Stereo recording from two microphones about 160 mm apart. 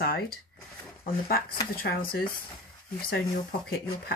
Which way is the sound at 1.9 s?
90° left.